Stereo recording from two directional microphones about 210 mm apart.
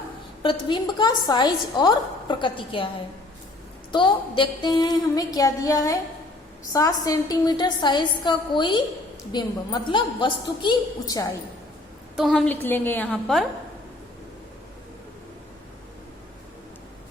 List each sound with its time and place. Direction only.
0.4 s a woman's voice: 20° left (ahead or behind)
3.9 s a sound: 20° left (ahead or behind)
6.7 s a woman's voice: 15° left (ahead or behind)
12.1 s a woman's voice: centre (ahead or behind)